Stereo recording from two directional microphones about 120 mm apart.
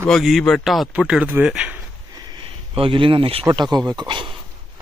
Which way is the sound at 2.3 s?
45° right (ahead or behind).